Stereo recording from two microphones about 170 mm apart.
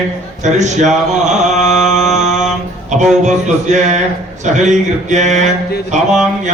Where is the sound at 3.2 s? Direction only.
45° right (ahead or behind).